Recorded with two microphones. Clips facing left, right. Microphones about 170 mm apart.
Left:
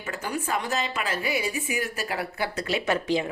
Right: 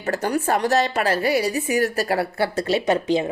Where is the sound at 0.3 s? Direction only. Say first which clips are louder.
Right 8 dB; 70° right (ahead or behind).